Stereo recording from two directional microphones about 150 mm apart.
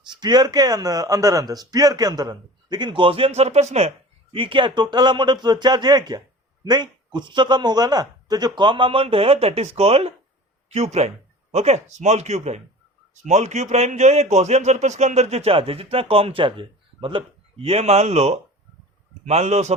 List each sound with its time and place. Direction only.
0.0 s speech: 30° right (ahead or behind); by 19.7 s 50° right (ahead or behind)